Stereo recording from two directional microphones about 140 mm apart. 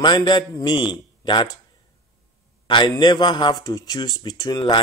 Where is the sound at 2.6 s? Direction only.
35° left (ahead or behind).